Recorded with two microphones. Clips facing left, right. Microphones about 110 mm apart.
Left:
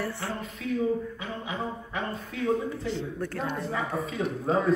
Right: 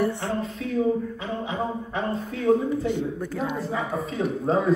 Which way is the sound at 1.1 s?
30° right (ahead or behind).